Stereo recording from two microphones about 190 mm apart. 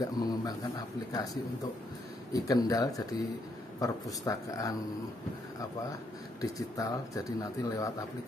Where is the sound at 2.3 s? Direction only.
20° left (ahead or behind).